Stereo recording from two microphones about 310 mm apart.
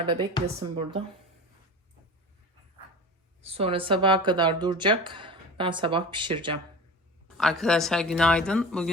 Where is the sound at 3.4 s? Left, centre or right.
Centre.